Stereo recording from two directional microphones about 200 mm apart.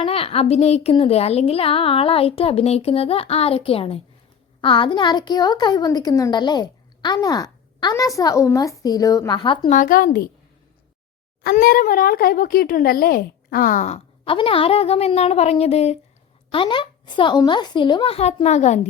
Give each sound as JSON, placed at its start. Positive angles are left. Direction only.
{"t": 0.0, "sound": "a woman's voice", "side_deg": 30}
{"t": 9.7, "sound": "speech", "side_deg": 45}
{"t": 11.4, "sound": "a woman's voice", "side_deg": 45}